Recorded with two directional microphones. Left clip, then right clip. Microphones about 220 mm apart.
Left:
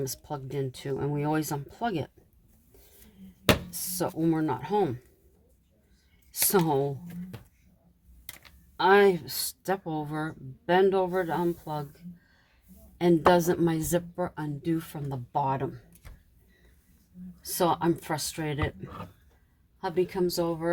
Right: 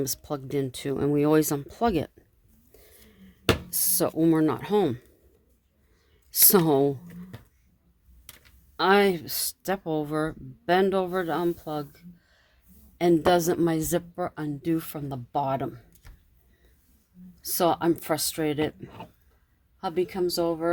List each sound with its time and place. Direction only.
0.0 s speech: 40° right (ahead or behind)
3.7 s speech: 40° right (ahead or behind)
6.3 s speech: 40° right (ahead or behind)
8.7 s speech: 40° right (ahead or behind)
13.0 s speech: 35° right (ahead or behind)
17.4 s speech: 40° right (ahead or behind)